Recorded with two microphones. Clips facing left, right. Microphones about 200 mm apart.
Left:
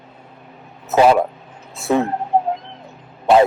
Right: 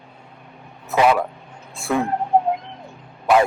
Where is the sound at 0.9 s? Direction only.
30° left (ahead or behind).